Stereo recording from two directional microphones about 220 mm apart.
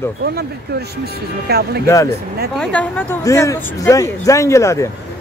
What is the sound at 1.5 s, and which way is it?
Speech, 45° right (ahead or behind).